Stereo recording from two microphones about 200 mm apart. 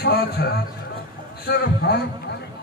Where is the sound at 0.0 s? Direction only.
50° left (ahead or behind).